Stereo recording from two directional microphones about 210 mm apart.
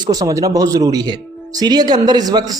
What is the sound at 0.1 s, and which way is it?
A man's voice, 15° right (ahead or behind).